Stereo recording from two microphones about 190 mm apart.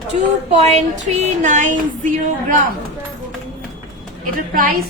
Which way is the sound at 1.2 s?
40° right (ahead or behind).